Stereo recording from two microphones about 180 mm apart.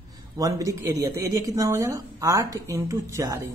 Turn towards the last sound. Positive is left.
turn(degrees=-15)  # may be behind; listen again after turning